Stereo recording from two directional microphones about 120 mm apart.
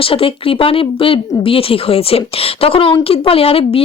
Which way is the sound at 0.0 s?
50° left (ahead or behind).